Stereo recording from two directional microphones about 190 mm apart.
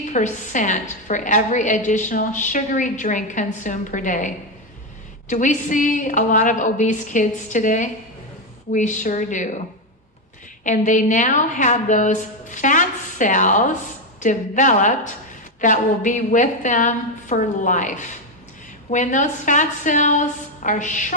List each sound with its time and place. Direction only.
0.1 s a woman's voice: 40° left (ahead or behind)
5.3 s a woman's voice: 40° left (ahead or behind)
10.6 s a woman's voice: 40° left (ahead or behind)